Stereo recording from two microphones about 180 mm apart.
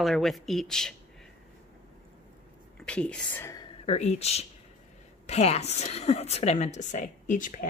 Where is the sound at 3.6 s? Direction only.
30° left (ahead or behind).